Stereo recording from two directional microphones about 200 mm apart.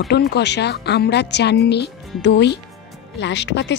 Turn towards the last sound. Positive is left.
turn(degrees=60)  # may be behind; listen again after turning